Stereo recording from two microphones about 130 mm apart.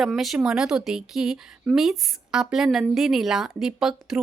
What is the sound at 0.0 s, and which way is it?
A woman's voice, centre (ahead or behind).